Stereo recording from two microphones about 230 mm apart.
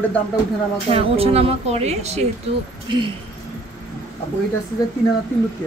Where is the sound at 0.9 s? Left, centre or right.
Right.